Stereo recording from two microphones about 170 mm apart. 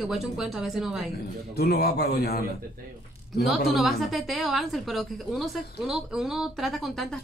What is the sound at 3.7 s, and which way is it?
A woman's voice, centre (ahead or behind).